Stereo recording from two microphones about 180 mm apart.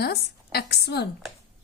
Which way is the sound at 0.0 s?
60° left (ahead or behind).